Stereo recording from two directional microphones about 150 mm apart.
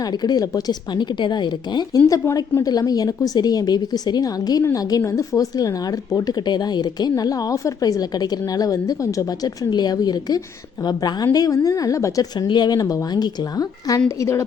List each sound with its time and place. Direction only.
0.2 s speech: 25° left (ahead or behind)